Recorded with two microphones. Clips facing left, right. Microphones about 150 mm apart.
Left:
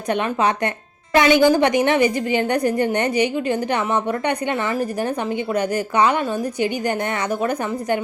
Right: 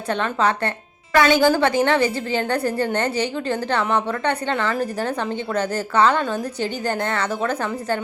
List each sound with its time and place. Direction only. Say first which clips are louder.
0.1 s a woman's voice: left 1 dB; 15° left (ahead or behind)